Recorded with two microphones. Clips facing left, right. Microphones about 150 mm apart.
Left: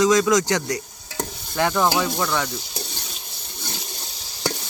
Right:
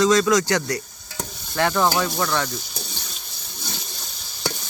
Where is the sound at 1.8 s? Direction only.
5° left (ahead or behind).